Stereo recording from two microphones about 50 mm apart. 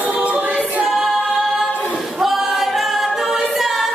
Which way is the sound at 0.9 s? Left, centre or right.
Centre.